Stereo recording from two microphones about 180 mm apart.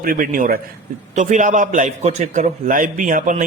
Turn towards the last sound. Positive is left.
turn(degrees=-45)  # may be behind; listen again after turning